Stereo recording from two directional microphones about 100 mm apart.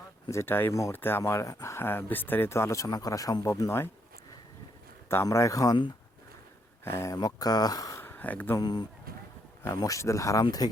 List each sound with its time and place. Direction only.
0.3 s speech: 25° left (ahead or behind)
5.0 s speech: 25° left (ahead or behind)
6.8 s speech: 25° left (ahead or behind)
7.2 s speech: 40° left (ahead or behind)
8.0 s a sound: 15° left (ahead or behind)
8.5 s speech: 45° left (ahead or behind)
9.6 s speech: 30° left (ahead or behind)